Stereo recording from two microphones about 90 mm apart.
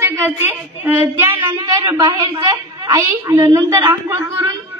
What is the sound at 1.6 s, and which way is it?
Speech, 40° right (ahead or behind).